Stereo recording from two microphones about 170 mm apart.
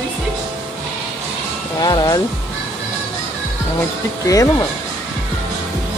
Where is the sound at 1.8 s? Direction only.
25° left (ahead or behind).